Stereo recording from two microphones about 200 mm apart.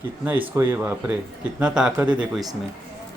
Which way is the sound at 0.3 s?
10° right (ahead or behind).